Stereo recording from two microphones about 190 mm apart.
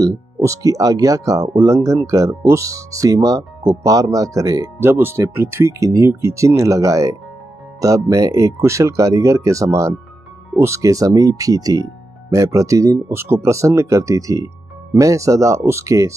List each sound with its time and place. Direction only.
0.0 s speech: 15° right (ahead or behind)